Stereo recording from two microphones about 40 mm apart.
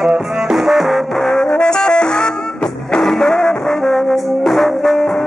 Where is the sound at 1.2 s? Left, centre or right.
Centre.